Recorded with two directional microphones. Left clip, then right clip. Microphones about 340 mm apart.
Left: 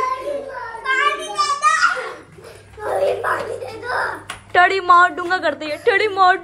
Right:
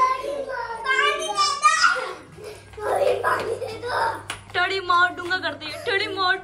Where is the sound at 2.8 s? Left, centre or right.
Centre.